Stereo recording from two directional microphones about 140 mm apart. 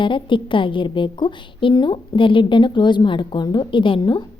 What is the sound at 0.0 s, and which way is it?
A woman's voice, 35° left (ahead or behind).